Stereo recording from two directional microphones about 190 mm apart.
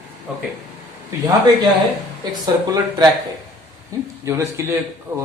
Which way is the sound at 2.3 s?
20° right (ahead or behind).